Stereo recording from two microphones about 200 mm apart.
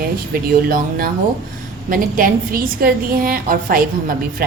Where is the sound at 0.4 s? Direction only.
50° right (ahead or behind).